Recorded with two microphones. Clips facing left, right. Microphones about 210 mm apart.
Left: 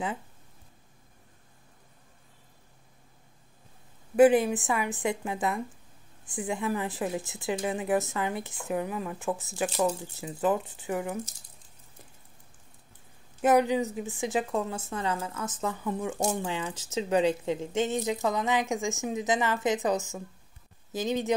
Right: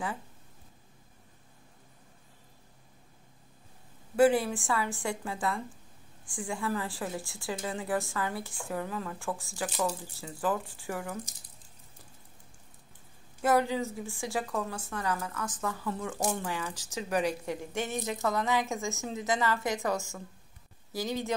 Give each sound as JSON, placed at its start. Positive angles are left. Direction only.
{"t": 4.2, "sound": "a woman's voice", "side_deg": 20}
{"t": 13.4, "sound": "a woman's voice", "side_deg": 20}